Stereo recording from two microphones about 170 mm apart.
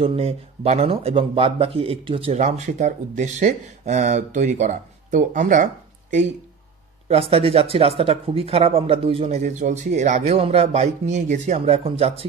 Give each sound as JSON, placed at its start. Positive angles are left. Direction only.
{"t": 0.0, "sound": "speech", "side_deg": -35}
{"t": 7.1, "sound": "speech", "side_deg": -35}